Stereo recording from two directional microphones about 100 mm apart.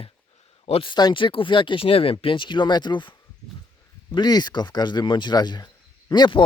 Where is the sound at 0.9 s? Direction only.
50° left (ahead or behind); by 2.1 s 70° left (ahead or behind).